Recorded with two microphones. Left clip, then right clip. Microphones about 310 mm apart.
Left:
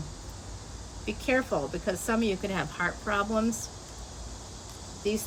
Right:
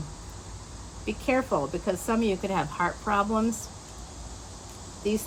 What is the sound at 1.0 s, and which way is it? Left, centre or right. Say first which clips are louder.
A woman's voice: right 1 dB; centre.